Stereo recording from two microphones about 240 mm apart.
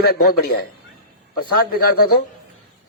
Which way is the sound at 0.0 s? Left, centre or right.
Left.